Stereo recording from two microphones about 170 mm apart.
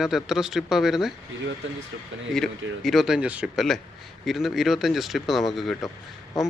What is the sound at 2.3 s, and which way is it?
Speech, centre (ahead or behind).